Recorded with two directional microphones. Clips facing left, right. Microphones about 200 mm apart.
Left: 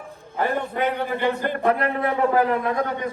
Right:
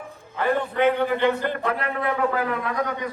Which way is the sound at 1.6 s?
30° left (ahead or behind).